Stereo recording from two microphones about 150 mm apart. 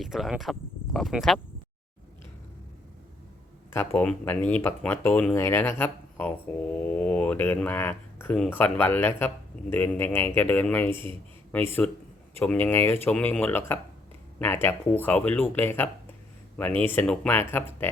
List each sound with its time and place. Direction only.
0.0 s speech: centre (ahead or behind)
3.7 s speech: 15° left (ahead or behind)
10.9 s a man's voice: 35° right (ahead or behind)
11.8 s speech: 5° left (ahead or behind)